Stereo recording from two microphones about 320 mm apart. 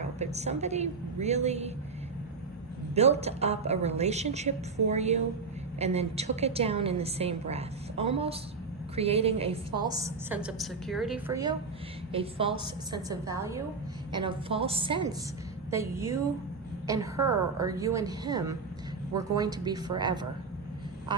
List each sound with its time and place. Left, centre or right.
0.0 s a woman's voice: right
2.9 s a woman's voice: centre